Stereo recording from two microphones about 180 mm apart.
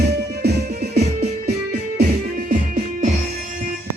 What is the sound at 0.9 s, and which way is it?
Music, 60° right (ahead or behind).